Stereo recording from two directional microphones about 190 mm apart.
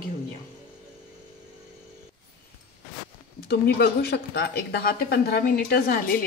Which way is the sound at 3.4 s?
60° left (ahead or behind).